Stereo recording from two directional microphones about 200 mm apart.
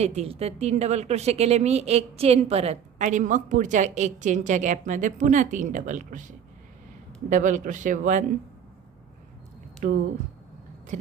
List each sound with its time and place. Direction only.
0.0 s speech: 30° right (ahead or behind)
9.8 s speech: 40° right (ahead or behind)